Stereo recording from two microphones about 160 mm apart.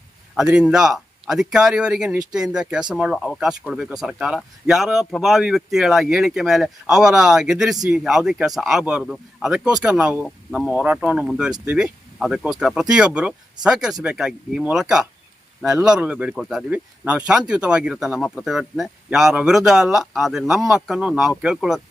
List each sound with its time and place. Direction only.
0.3 s speech: 5° right (ahead or behind)